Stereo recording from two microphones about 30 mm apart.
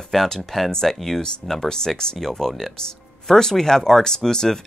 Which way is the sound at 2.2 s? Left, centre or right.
Centre.